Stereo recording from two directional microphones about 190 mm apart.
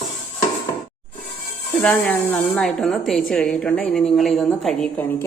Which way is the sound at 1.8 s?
5° left (ahead or behind).